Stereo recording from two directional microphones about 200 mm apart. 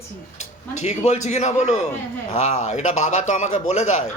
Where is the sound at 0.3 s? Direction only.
35° left (ahead or behind).